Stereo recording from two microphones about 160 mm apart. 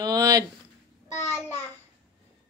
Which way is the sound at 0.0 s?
20° right (ahead or behind).